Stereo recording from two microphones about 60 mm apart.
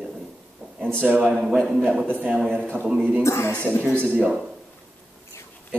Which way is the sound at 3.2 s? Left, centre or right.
Left.